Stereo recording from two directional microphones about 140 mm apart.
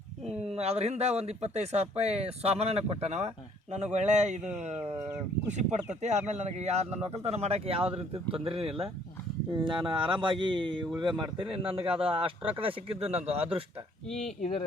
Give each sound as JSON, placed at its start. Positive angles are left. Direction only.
{"t": 0.3, "sound": "a man's voice", "side_deg": -45}
{"t": 4.8, "sound": "speech", "side_deg": -20}
{"t": 5.5, "sound": "a man's voice", "side_deg": -55}
{"t": 14.1, "sound": "speech", "side_deg": 5}